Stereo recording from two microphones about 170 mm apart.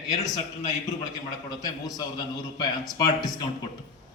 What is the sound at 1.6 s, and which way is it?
A man's voice, 25° left (ahead or behind).